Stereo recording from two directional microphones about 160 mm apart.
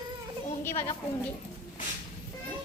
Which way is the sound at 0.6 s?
15° left (ahead or behind).